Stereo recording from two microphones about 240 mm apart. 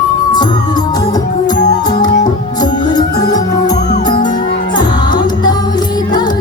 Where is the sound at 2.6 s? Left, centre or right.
Centre.